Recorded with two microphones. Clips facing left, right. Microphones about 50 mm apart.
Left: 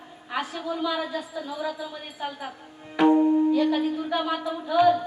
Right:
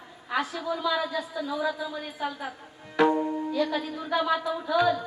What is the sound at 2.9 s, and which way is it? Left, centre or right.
Tabla, left.